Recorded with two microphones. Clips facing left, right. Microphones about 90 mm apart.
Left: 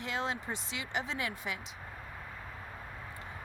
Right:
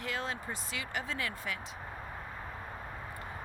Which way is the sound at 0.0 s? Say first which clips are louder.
Left 1 dB; 20° left (ahead or behind).